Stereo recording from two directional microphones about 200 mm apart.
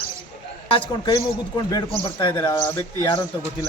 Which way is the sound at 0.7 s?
25° left (ahead or behind).